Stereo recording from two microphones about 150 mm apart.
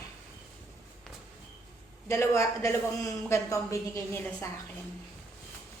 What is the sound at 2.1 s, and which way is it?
A woman's voice, 20° left (ahead or behind).